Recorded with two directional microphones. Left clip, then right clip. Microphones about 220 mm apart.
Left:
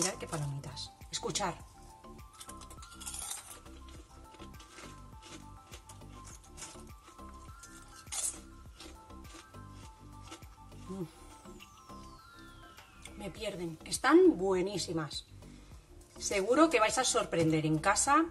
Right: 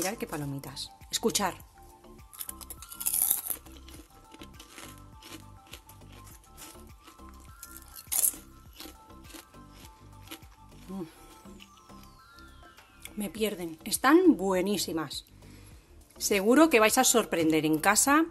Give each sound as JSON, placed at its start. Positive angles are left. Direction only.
{"t": 0.0, "sound": "a woman's voice", "side_deg": -50}
{"t": 2.3, "sound": "music", "side_deg": -45}
{"t": 13.2, "sound": "a woman's voice", "side_deg": -50}